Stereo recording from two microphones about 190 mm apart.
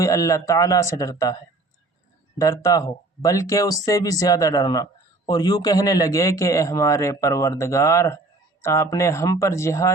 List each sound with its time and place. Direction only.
0.0 s speech: 15° left (ahead or behind)
2.4 s speech: 20° left (ahead or behind)